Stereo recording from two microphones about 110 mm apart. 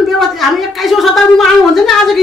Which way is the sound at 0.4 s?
Centre (ahead or behind).